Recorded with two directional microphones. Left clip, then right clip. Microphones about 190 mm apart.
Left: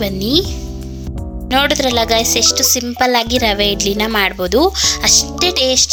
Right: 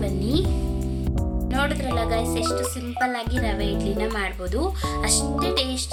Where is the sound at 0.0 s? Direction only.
45° left (ahead or behind).